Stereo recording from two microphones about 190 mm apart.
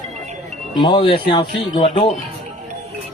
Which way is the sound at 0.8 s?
25° left (ahead or behind).